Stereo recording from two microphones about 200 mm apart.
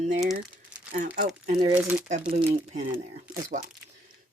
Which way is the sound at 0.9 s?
45° right (ahead or behind).